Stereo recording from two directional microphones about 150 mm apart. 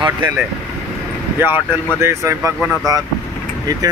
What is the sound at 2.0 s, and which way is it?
Speech, 20° right (ahead or behind).